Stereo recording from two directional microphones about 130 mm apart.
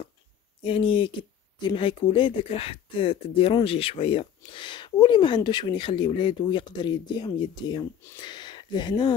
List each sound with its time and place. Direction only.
0.7 s speech: 40° left (ahead or behind)